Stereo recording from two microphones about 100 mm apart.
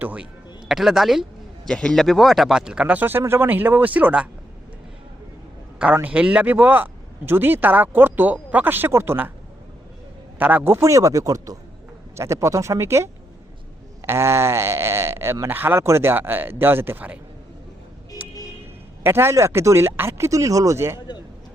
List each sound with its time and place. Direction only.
0.0 s speech: 15° right (ahead or behind)
0.7 s speech: 5° right (ahead or behind)
5.8 s speech: 15° right (ahead or behind)
10.3 s a man's voice: 20° right (ahead or behind)
18.2 s vehicle: 15° right (ahead or behind)
19.0 s speech: 25° right (ahead or behind)